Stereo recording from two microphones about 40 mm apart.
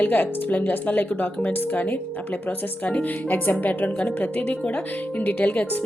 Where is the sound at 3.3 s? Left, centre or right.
Left.